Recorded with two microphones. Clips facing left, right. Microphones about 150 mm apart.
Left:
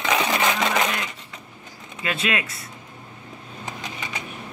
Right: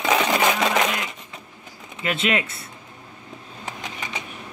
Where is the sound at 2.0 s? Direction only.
20° right (ahead or behind).